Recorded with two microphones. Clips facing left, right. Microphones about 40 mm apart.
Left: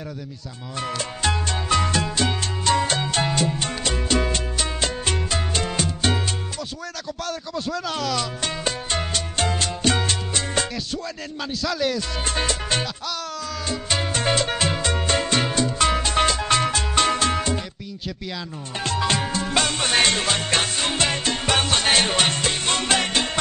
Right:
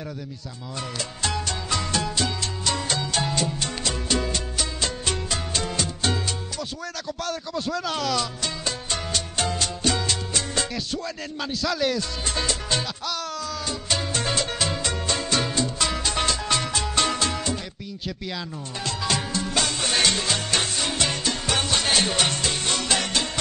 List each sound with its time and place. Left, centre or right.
0.7 s music: left
2.1 s salsa music: left
4.3 s music: left
7.2 s speech: centre
8.4 s music: left
11.5 s speech: centre
12.4 s music: left
13.7 s salsa music: left
14.8 s music: left
18.9 s music: left